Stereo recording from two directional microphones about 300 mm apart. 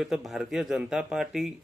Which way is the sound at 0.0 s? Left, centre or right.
Centre.